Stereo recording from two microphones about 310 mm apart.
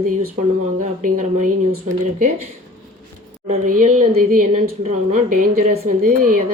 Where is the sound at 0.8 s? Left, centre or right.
Right.